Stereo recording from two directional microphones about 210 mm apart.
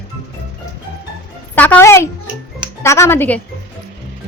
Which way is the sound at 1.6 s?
10° left (ahead or behind).